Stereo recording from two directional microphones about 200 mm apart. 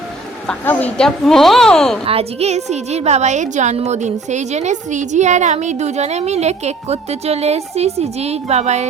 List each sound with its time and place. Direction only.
0.4 s a woman's voice: 10° left (ahead or behind)
2.0 s a woman's voice: 30° right (ahead or behind)